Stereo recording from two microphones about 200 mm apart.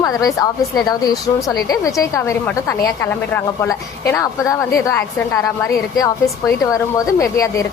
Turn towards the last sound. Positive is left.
turn(degrees=15)  # may be behind; listen again after turning